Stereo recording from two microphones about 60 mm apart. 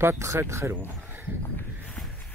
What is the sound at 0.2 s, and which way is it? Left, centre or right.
Speech, right.